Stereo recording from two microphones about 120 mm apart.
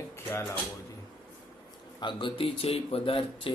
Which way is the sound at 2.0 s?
40° left (ahead or behind).